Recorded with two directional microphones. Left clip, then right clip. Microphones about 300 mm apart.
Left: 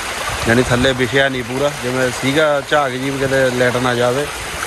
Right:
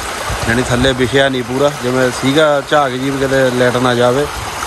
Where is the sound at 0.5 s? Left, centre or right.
Centre.